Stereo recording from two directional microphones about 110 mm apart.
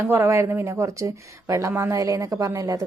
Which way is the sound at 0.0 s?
25° right (ahead or behind).